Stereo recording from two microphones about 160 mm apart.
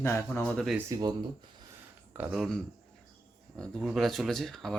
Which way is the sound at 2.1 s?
5° right (ahead or behind).